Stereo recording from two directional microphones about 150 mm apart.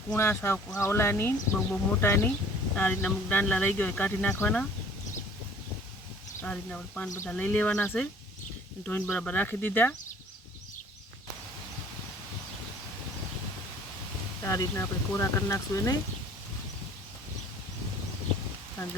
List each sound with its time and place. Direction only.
0.2 s speech: 15° left (ahead or behind)
6.4 s speech: 5° left (ahead or behind)
14.4 s speech: 20° left (ahead or behind)